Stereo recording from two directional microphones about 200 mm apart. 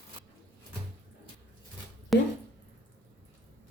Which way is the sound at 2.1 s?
Centre (ahead or behind).